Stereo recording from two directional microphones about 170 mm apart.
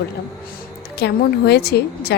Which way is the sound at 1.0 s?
75° left (ahead or behind).